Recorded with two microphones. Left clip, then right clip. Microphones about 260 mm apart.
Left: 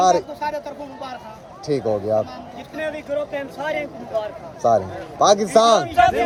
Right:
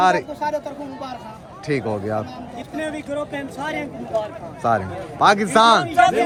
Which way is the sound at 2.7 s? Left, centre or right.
Centre.